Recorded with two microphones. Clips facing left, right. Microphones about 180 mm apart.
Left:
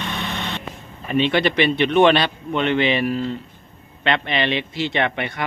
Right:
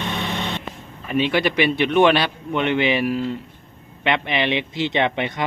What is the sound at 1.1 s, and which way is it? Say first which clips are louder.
A man's voice: left 1 dB; 5° right (ahead or behind).